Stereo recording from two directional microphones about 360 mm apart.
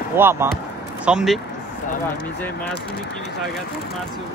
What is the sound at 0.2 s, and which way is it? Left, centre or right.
Speech, centre.